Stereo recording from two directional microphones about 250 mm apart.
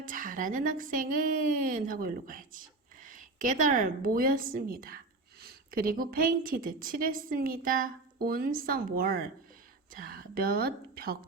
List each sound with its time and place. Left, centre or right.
0.1 s a woman's voice: right